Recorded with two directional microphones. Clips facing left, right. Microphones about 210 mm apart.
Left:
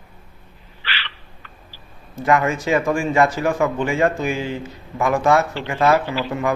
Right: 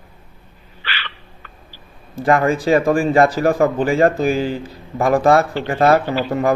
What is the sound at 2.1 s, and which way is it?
A man's voice, 30° right (ahead or behind).